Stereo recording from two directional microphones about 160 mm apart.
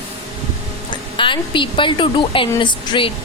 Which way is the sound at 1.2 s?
30° left (ahead or behind).